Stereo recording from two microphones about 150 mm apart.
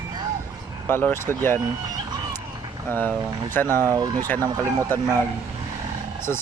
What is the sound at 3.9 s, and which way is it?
Speech, 25° right (ahead or behind).